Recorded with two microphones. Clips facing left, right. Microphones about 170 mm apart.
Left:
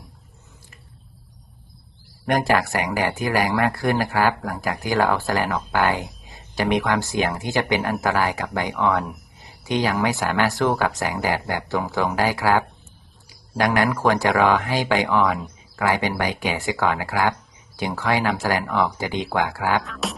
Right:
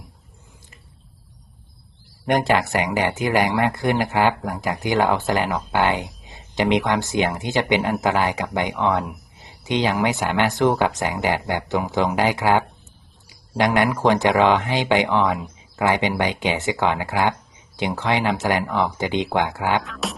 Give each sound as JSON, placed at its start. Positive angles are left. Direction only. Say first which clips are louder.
{"t": 2.2, "sound": "speech", "louder": "right 1 dB", "side_deg": -20}
{"t": 20.0, "sound": "music", "louder": "even", "side_deg": 0}